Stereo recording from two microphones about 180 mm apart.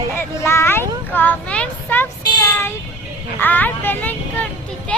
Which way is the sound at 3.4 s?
10° left (ahead or behind).